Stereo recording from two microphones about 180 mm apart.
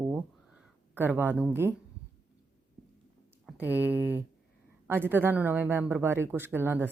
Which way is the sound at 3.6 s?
10° right (ahead or behind).